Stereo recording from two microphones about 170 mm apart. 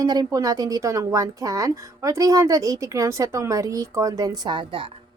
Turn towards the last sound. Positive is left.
turn(degrees=-30)  # may be behind; listen again after turning